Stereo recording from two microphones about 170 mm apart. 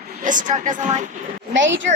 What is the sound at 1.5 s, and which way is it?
Speech, 90° right.